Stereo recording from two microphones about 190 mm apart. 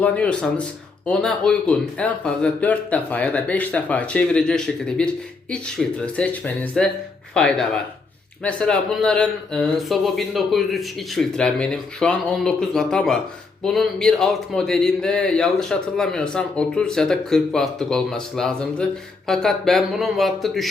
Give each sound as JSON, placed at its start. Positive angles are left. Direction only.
{"t": 0.0, "sound": "speech", "side_deg": 5}